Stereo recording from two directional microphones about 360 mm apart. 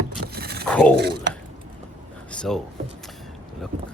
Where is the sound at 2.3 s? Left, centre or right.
Centre.